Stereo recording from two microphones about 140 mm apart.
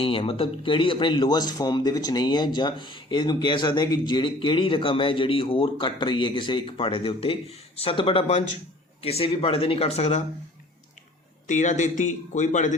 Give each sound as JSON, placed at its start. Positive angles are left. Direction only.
{"t": 0.0, "sound": "speech", "side_deg": 40}
{"t": 11.4, "sound": "a man's voice", "side_deg": 60}